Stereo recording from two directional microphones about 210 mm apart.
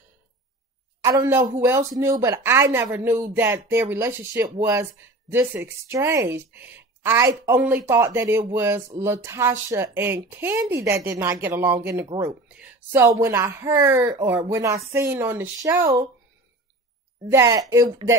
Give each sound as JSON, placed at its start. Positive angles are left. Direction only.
{"t": 1.0, "sound": "speech", "side_deg": -15}
{"t": 17.3, "sound": "speech", "side_deg": -15}